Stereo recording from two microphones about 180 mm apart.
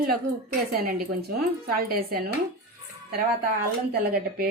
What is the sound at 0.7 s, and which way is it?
Speech, 55° right (ahead or behind).